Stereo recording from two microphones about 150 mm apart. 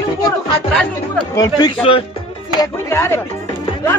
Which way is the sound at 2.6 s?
20° left (ahead or behind).